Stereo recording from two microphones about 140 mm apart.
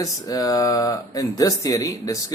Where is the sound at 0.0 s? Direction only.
25° left (ahead or behind).